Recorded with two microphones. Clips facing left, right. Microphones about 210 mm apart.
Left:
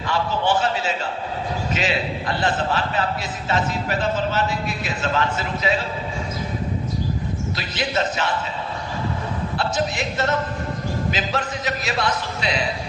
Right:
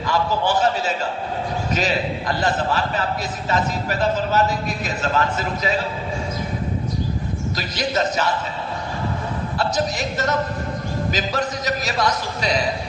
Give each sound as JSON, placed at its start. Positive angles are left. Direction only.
{"t": 0.1, "sound": "a sound", "side_deg": -40}
{"t": 5.0, "sound": "a man's voice", "side_deg": -40}
{"t": 7.5, "sound": "a man's voice", "side_deg": -40}
{"t": 9.6, "sound": "a man's voice", "side_deg": -40}